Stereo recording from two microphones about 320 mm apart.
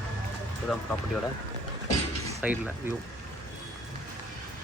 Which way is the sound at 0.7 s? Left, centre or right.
Centre.